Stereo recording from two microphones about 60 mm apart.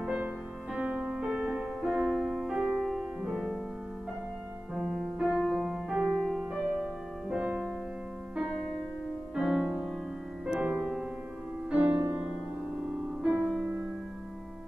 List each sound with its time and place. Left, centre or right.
0.0 s music: centre
0.7 s music: right; by 3.5 s centre
4.7 s music: centre
6.2 s music: centre
7.3 s music: centre
9.3 s music: centre